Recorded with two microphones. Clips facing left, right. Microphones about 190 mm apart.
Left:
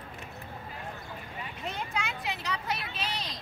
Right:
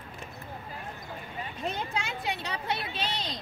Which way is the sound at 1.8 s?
30° right (ahead or behind).